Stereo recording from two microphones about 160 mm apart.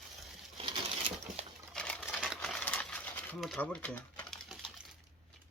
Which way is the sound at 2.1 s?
5° right (ahead or behind).